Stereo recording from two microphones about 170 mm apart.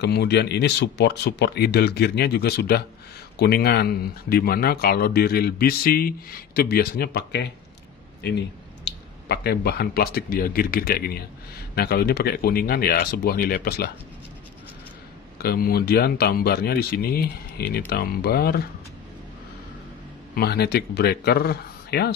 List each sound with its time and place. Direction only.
0.0 s speech: 75° left (ahead or behind)
8.2 s speech: 80° left; by 13.8 s 65° left (ahead or behind)
15.3 s speech: 65° left (ahead or behind)
20.3 s speech: 70° left (ahead or behind)